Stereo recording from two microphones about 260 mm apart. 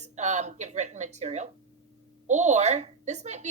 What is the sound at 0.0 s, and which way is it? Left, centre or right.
A woman's voice, right.